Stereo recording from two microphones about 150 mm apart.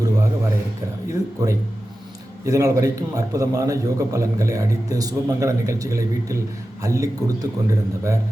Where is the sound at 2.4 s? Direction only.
20° right (ahead or behind).